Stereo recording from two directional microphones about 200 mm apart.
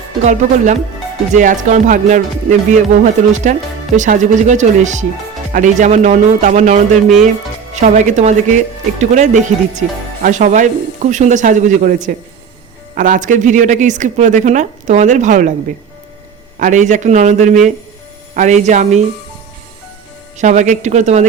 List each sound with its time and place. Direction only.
0.2 s speech: 35° right (ahead or behind)
16.6 s speech: 40° right (ahead or behind)
20.4 s speech: 35° right (ahead or behind)